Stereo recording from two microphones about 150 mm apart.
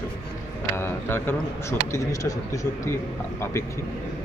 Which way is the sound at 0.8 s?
15° left (ahead or behind).